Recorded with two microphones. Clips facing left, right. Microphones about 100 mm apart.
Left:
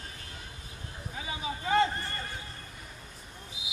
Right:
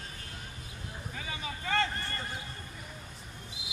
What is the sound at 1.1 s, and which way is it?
Vehicle, 15° left (ahead or behind).